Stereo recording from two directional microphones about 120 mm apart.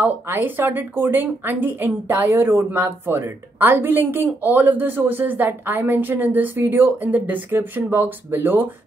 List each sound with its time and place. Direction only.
0.0 s speech: 15° right (ahead or behind)